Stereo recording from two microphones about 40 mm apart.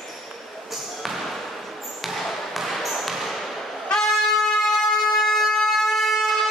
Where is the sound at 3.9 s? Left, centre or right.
Centre.